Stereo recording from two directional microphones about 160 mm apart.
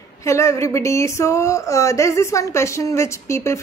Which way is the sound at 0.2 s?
20° left (ahead or behind).